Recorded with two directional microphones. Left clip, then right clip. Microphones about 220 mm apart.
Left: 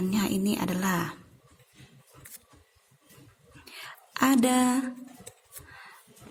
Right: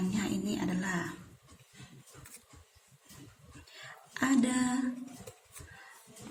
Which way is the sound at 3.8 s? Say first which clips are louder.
Left 7 dB; 45° left (ahead or behind).